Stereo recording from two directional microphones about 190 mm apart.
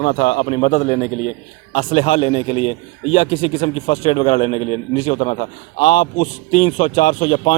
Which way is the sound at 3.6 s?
40° left (ahead or behind).